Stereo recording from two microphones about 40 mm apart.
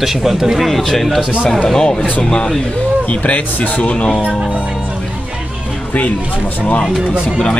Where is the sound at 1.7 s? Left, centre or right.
Centre.